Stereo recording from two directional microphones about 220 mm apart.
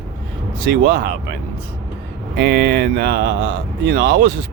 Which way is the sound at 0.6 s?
45° right (ahead or behind).